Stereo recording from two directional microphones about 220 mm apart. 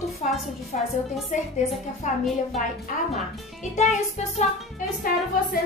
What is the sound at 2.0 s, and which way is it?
Speech, 35° left (ahead or behind).